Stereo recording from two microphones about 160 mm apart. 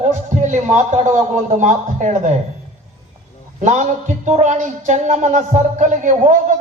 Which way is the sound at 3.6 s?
50° right (ahead or behind).